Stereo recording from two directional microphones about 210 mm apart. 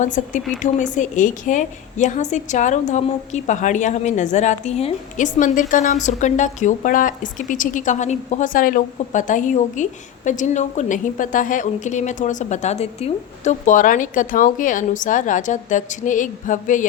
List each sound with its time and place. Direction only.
0.0 s a woman's voice: 35° left (ahead or behind)